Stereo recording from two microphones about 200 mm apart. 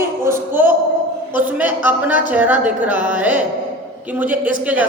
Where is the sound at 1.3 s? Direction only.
10° right (ahead or behind).